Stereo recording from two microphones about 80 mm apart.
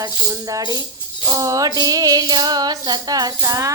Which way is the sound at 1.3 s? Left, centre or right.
Right.